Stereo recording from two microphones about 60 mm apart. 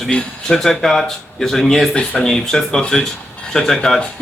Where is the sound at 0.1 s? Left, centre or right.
Centre.